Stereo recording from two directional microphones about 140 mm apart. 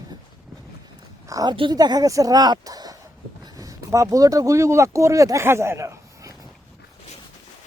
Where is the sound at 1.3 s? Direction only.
25° right (ahead or behind).